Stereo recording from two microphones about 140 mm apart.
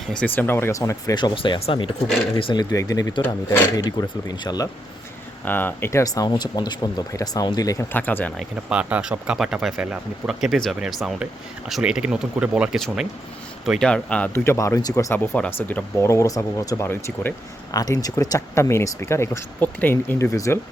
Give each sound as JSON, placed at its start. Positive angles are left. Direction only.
{"t": 0.1, "sound": "speech", "side_deg": 10}
{"t": 5.5, "sound": "speech", "side_deg": 15}
{"t": 7.9, "sound": "speech", "side_deg": 15}
{"t": 8.4, "sound": "speech", "side_deg": -10}